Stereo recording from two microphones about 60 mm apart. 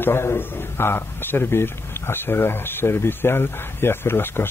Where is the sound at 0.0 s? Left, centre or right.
Left.